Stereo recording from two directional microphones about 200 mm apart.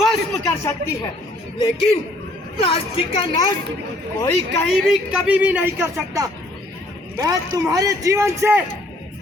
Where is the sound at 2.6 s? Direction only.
25° left (ahead or behind).